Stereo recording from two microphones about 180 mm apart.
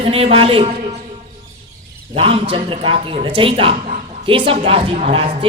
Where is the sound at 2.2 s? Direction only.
30° right (ahead or behind).